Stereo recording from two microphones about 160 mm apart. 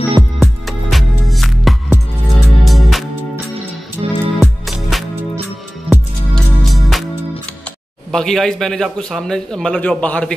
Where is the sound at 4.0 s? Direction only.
25° right (ahead or behind).